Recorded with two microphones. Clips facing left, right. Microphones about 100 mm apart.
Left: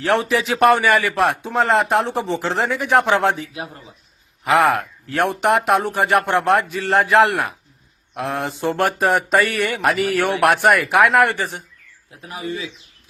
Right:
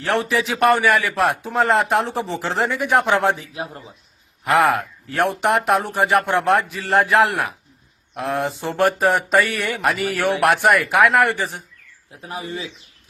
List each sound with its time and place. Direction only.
0.0 s a man's voice: centre (ahead or behind)
3.5 s speech: 30° right (ahead or behind)
4.4 s a man's voice: centre (ahead or behind)
12.2 s speech: 30° right (ahead or behind)